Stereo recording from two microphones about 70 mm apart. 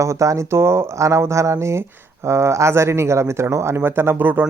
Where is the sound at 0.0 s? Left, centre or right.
Right.